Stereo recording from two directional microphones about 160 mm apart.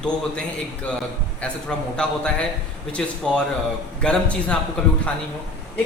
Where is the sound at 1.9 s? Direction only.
5° left (ahead or behind).